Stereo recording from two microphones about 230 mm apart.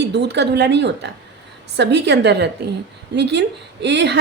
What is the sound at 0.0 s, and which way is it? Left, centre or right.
A woman's voice, right.